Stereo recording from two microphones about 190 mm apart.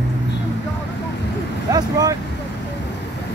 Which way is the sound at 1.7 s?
20° right (ahead or behind).